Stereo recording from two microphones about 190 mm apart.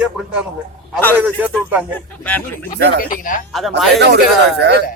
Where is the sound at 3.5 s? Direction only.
Centre (ahead or behind).